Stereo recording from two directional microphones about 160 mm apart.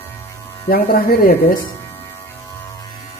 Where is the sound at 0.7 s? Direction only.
70° left (ahead or behind).